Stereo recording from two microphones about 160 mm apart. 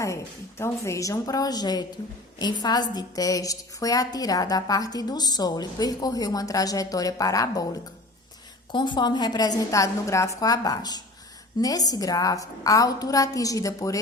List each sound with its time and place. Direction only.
0.6 s a woman's voice: 20° left (ahead or behind)
8.7 s a woman's voice: 30° left (ahead or behind)